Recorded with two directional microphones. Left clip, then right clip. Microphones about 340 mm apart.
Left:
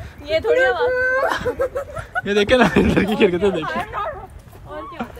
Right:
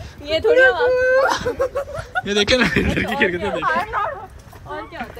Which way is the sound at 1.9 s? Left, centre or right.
Centre.